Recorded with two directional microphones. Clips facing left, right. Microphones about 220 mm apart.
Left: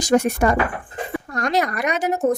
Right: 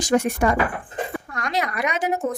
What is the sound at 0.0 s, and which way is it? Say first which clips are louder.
Speech: left 2 dB; 40° left (ahead or behind).